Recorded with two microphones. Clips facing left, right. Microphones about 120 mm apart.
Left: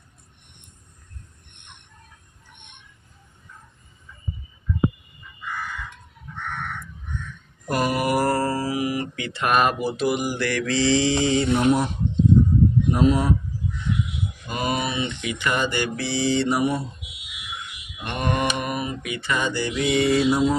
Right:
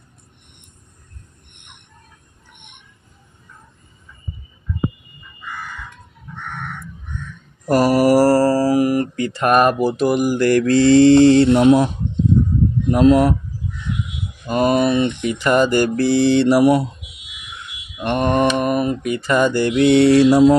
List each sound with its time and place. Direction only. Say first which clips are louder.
7.6 s mantra: right 9 dB; 35° right (ahead or behind); by 11.9 s 90° right
12.9 s speech: right 11 dB; 90° right
14.5 s mantra: right 10 dB; 50° right (ahead or behind)
15.3 s mantra: right 9 dB; 40° right (ahead or behind); by 16.8 s 80° right
18.0 s mantra: right 8 dB; 45° right (ahead or behind); by 20.5 s 90° right